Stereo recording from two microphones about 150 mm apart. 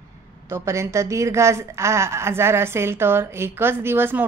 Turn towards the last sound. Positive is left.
turn(degrees=-15)  # may be behind; listen again after turning